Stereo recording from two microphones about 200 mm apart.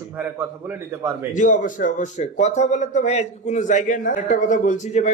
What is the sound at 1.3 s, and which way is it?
A man's voice, 40° left (ahead or behind).